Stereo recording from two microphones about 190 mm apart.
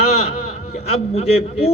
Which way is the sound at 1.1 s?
35° left (ahead or behind).